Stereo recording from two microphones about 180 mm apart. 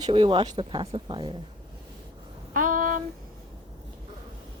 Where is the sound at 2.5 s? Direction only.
45° right (ahead or behind).